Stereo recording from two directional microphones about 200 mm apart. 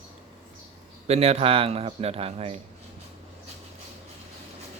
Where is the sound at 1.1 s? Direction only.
30° right (ahead or behind).